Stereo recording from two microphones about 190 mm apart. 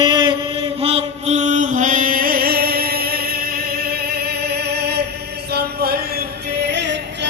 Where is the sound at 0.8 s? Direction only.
30° right (ahead or behind); by 3.3 s 55° right (ahead or behind).